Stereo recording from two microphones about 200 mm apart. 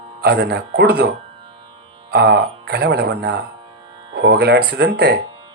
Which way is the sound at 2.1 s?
55° right (ahead or behind).